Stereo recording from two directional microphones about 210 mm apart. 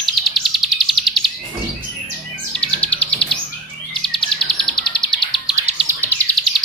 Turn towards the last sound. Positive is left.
turn(degrees=5)  # may be behind; listen again after turning